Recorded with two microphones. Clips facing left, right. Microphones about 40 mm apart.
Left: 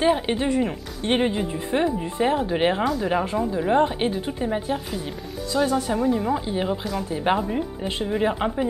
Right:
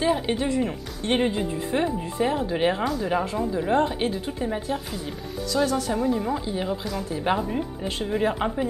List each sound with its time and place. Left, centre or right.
0.0 s a woman's voice: left
5.9 s a woman's voice: centre
7.1 s a woman's voice: left
7.3 s speech: centre